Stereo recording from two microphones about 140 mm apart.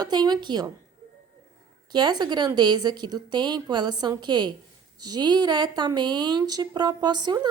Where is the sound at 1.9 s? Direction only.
30° right (ahead or behind).